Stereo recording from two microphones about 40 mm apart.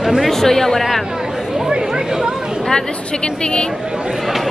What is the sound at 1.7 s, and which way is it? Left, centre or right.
Chatter, centre.